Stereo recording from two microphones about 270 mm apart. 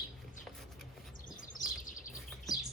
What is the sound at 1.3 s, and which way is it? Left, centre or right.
Bird, left.